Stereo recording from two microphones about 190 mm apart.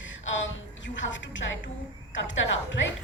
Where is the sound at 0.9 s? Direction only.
75° left (ahead or behind).